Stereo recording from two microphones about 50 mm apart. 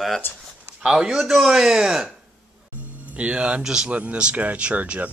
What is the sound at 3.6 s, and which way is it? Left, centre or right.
Speech, centre.